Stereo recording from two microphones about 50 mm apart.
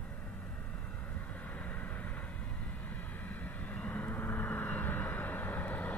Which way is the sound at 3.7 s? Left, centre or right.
Left.